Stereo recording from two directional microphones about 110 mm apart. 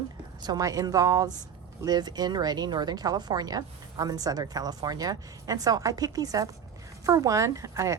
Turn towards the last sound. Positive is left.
turn(degrees=-30)  # may be behind; listen again after turning